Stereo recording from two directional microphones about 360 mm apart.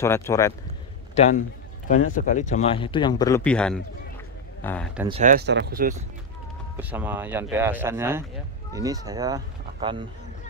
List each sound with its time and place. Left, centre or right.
0.0 s a man's voice: centre
5.0 s speech: centre
6.8 s speech: centre